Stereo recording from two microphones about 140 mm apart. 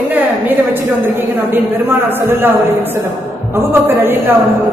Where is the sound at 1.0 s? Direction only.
15° right (ahead or behind).